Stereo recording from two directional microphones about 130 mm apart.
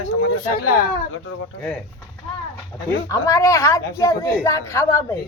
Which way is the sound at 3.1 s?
25° left (ahead or behind).